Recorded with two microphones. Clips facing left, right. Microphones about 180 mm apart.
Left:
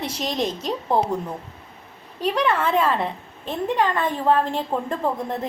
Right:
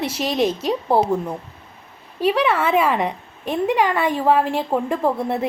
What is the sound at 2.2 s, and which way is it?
A woman's voice, 5° right (ahead or behind).